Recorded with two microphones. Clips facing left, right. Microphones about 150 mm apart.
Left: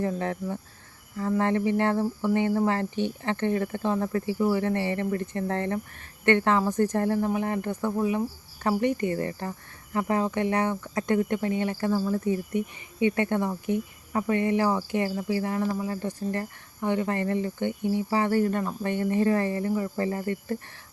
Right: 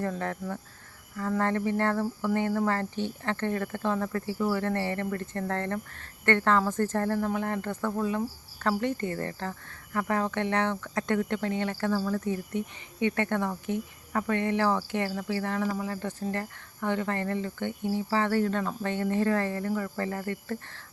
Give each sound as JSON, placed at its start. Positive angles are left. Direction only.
{"t": 0.0, "sound": "speech", "side_deg": 20}